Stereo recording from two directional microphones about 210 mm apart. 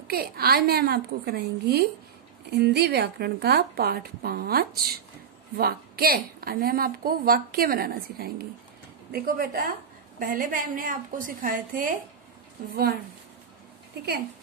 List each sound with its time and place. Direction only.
0.1 s a woman's voice: 45° right (ahead or behind)